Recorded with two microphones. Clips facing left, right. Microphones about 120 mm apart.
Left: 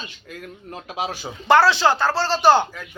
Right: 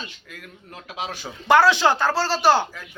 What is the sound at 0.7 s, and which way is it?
Speech, 30° left (ahead or behind).